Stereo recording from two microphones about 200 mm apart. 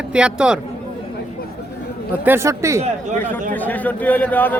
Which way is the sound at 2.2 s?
10° right (ahead or behind).